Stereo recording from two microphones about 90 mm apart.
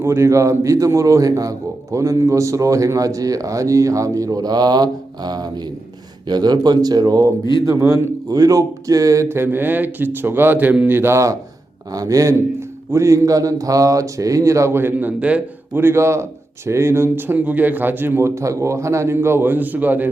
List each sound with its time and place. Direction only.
0.0 s a man's voice: 30° right (ahead or behind); by 7.3 s 45° right (ahead or behind)
7.6 s a man's voice: 30° right (ahead or behind)
8.3 s a man's voice: 40° right (ahead or behind); by 20.1 s 20° right (ahead or behind)